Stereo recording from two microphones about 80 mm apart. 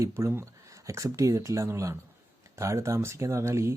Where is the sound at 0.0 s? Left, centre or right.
Right.